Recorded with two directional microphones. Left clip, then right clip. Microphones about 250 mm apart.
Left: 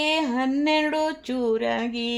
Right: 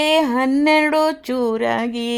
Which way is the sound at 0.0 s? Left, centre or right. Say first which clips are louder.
Right 7 dB; right.